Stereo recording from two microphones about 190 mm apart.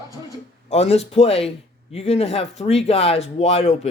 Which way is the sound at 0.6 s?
35° left (ahead or behind).